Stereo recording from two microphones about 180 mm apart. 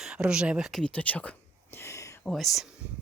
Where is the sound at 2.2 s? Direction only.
Centre (ahead or behind).